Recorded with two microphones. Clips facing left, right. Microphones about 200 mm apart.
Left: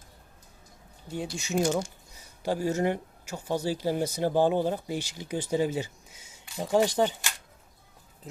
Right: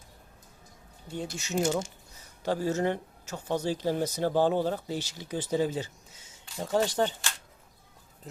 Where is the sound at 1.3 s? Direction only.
15° left (ahead or behind).